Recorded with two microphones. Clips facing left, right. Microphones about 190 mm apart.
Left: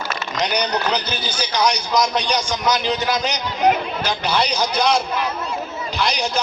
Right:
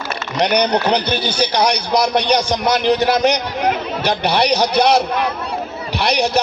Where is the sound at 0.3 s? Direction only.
60° right (ahead or behind).